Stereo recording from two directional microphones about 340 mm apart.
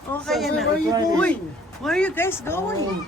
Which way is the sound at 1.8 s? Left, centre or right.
Centre.